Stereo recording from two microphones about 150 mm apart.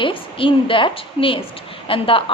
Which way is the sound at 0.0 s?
35° left (ahead or behind).